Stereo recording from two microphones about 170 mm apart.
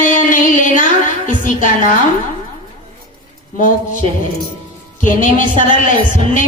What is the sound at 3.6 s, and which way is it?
Speech, 50° left (ahead or behind).